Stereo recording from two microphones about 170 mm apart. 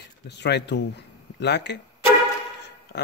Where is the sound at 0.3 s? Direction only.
85° left.